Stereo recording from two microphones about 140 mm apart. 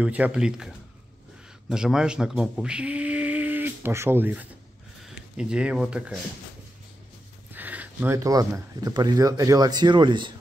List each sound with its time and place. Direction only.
0.0 s speech: 10° right (ahead or behind)
7.5 s speech: 10° right (ahead or behind); by 10.3 s 35° right (ahead or behind)